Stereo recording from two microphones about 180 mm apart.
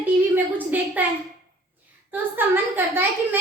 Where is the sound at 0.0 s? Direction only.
10° right (ahead or behind).